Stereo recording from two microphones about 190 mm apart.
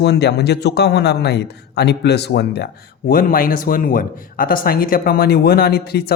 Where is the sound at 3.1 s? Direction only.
50° left (ahead or behind).